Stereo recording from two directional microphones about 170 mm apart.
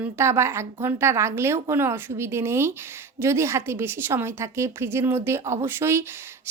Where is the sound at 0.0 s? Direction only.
15° right (ahead or behind).